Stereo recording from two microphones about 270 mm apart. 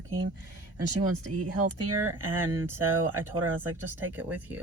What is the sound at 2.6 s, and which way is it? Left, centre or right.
Speech, centre.